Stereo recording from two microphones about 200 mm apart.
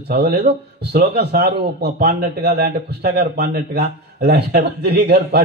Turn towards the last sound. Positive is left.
turn(degrees=-50)  # may be behind; listen again after turning